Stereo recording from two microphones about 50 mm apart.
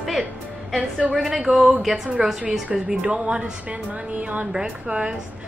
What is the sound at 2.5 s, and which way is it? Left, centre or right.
A woman's voice, centre.